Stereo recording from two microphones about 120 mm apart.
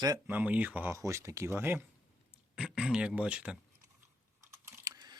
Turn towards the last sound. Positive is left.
turn(degrees=-30)  # may be behind; listen again after turning